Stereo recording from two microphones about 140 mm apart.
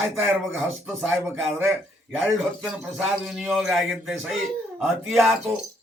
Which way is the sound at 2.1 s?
5° right (ahead or behind).